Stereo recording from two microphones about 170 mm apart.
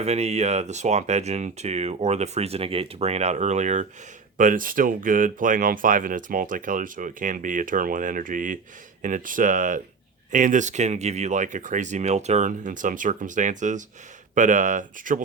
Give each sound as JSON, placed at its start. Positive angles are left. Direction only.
{"t": 0.0, "sound": "speech", "side_deg": -40}